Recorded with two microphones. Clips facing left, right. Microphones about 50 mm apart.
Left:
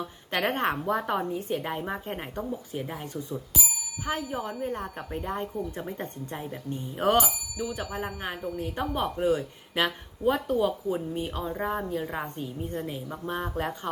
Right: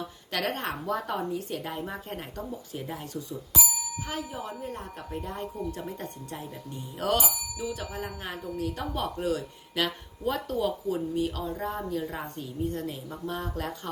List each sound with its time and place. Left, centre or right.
0.3 s speech: left